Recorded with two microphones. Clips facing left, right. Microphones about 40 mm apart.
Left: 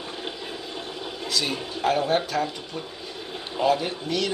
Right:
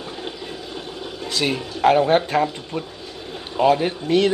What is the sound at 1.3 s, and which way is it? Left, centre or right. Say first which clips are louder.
Speech: right 5 dB; right.